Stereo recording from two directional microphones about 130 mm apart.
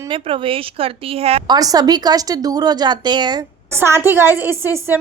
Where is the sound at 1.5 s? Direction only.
30° right (ahead or behind).